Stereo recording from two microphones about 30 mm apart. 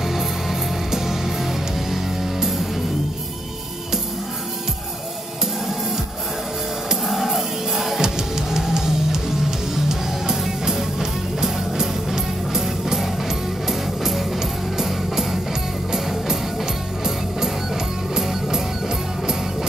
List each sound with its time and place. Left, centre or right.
0.0 s music: centre
5.4 s music: centre
8.0 s music: centre
18.1 s music: centre